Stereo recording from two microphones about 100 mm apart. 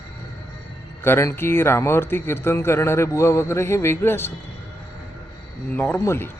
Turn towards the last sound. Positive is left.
turn(degrees=25)  # may be behind; listen again after turning